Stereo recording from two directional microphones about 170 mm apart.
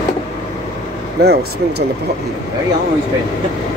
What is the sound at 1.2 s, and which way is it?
Speech, 75° right (ahead or behind).